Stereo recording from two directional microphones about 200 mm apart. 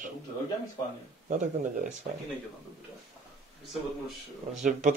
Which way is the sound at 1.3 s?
40° right (ahead or behind).